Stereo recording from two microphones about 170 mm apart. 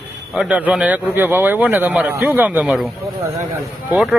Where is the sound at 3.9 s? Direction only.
5° right (ahead or behind).